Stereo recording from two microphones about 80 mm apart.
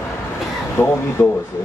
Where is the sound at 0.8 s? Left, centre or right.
Left.